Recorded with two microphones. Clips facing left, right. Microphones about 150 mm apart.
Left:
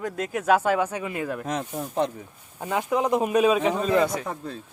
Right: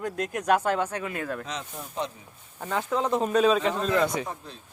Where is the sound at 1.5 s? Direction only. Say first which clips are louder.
Left 7 dB; 55° left (ahead or behind).